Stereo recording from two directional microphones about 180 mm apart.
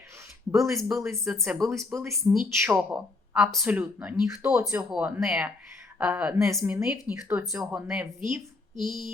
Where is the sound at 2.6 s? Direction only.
5° right (ahead or behind).